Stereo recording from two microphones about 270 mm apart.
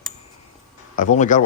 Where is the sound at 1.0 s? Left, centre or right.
Left.